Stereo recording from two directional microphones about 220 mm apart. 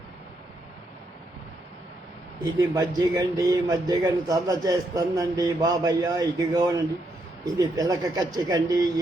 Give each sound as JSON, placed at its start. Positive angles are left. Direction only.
{"t": 2.4, "sound": "speech", "side_deg": -15}